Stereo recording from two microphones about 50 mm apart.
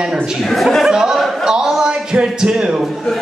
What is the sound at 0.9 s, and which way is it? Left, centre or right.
Speech, centre.